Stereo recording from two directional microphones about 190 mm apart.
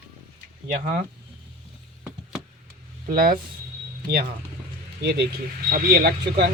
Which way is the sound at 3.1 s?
50° right (ahead or behind).